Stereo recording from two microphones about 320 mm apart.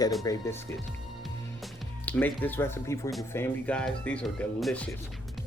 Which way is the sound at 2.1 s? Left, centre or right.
Centre.